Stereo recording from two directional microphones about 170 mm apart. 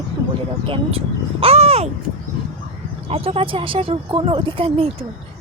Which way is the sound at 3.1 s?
35° right (ahead or behind).